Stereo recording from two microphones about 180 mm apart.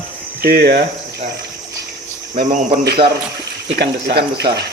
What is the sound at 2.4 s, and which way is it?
Speech, 55° right (ahead or behind).